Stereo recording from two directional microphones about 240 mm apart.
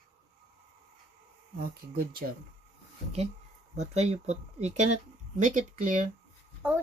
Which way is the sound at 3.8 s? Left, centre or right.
Right.